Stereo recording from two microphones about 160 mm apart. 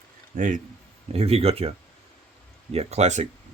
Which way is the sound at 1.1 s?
40° right (ahead or behind).